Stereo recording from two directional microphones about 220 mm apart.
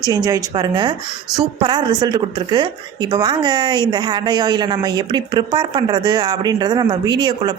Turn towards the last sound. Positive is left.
turn(degrees=-20)  # may be behind; listen again after turning